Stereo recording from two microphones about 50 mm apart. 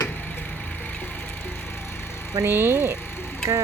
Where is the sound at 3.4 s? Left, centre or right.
Right.